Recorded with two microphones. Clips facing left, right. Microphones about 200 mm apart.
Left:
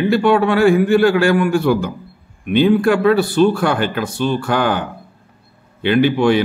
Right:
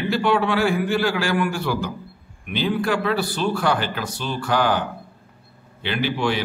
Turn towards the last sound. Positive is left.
turn(degrees=55)  # may be behind; listen again after turning